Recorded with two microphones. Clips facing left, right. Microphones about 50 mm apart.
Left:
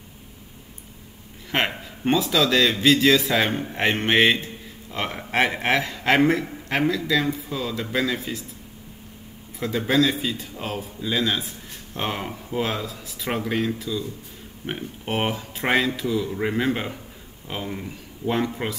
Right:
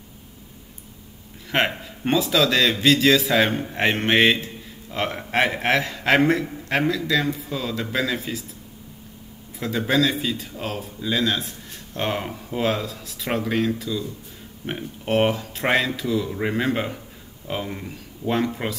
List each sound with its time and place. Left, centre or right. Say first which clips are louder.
1.4 s a man's voice: right 2 dB; centre
9.6 s a man's voice: even; centre